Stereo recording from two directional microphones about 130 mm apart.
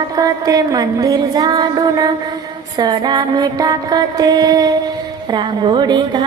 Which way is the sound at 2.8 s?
30° right (ahead or behind).